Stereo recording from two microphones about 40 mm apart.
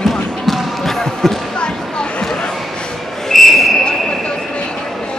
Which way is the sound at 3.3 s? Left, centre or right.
Centre.